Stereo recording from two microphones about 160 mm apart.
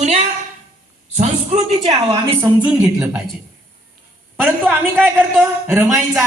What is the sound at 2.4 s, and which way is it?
Speech, 10° right (ahead or behind).